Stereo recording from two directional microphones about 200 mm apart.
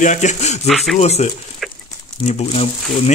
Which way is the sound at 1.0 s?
35° left (ahead or behind).